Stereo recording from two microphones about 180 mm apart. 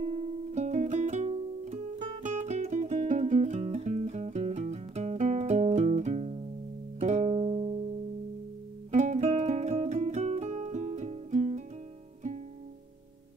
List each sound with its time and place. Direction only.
0.0 s music: 35° right (ahead or behind)
8.9 s music: 40° right (ahead or behind)